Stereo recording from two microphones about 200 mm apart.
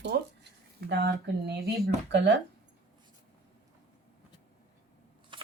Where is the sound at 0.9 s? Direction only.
60° right (ahead or behind).